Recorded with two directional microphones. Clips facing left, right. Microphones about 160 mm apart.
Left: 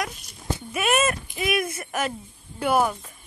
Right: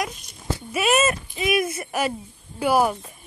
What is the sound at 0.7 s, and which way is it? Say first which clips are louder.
Speech: right 2 dB; 5° right (ahead or behind).